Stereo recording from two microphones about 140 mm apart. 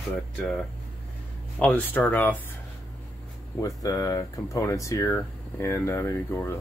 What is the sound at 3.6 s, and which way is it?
Speech, 25° left (ahead or behind).